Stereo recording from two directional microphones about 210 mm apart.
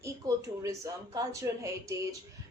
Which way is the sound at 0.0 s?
15° right (ahead or behind).